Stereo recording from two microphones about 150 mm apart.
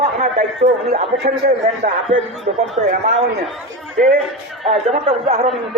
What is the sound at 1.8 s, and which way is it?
A man's voice, 50° right (ahead or behind).